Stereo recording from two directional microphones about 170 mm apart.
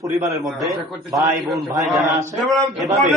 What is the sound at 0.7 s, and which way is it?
Speech, centre (ahead or behind).